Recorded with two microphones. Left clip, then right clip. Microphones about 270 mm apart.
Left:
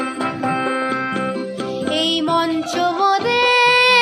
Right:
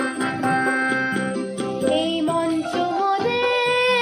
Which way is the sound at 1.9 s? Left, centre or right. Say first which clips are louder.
Left 4 dB; centre.